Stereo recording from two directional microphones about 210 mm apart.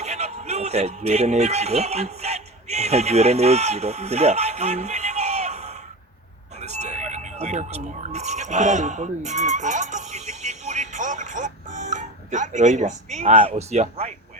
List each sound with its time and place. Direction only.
0.0 s a man's voice: 30° right (ahead or behind)